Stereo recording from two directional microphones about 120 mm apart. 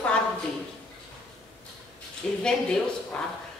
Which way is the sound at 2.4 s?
5° left (ahead or behind).